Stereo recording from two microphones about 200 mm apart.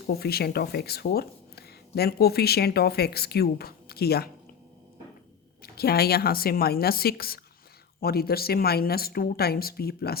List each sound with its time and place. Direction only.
0.1 s speech: 50° left (ahead or behind)
5.6 s speech: 50° left (ahead or behind)